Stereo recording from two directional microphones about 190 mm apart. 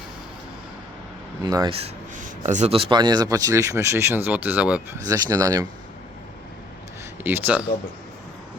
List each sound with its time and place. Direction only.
1.5 s speech: 20° right (ahead or behind)
2.1 s speech: 40° right (ahead or behind); by 5.6 s 20° right (ahead or behind)
7.3 s speech: 10° right (ahead or behind)